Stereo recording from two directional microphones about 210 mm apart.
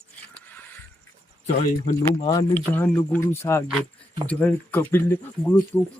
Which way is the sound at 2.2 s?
20° left (ahead or behind).